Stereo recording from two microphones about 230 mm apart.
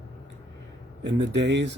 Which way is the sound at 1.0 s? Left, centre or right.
Right.